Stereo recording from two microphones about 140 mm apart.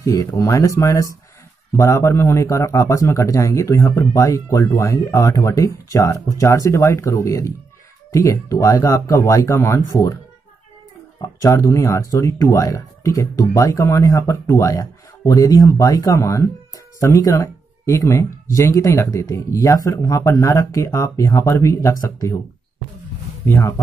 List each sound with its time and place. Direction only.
0.0 s a man's voice: 25° left (ahead or behind)
11.1 s a man's voice: 25° left (ahead or behind)
23.4 s speech: 20° left (ahead or behind)